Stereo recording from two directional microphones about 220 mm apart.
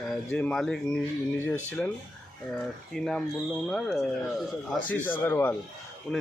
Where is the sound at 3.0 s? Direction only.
Centre (ahead or behind).